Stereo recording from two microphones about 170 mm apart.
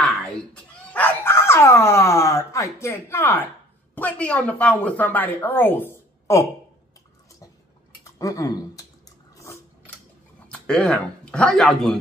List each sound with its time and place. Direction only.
0.9 s dog: 10° left (ahead or behind)
3.9 s a woman's voice: 10° left (ahead or behind)
8.0 s speech: 20° left (ahead or behind)
10.5 s speech: 5° left (ahead or behind)